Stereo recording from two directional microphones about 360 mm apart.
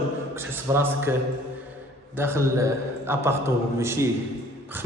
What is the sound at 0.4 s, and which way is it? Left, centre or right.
Speech, centre.